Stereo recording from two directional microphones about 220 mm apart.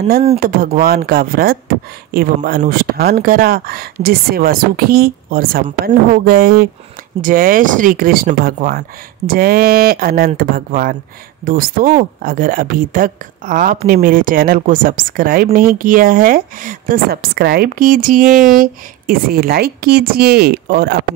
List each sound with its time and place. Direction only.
0.4 s a woman's voice: 40° right (ahead or behind)